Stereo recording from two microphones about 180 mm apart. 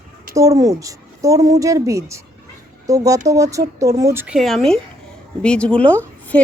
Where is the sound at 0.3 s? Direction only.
20° right (ahead or behind).